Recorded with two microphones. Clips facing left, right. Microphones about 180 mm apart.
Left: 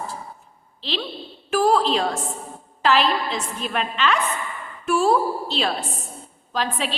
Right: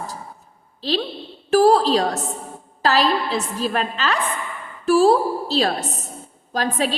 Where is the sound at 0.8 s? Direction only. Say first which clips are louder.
Right 6 dB; 40° right (ahead or behind).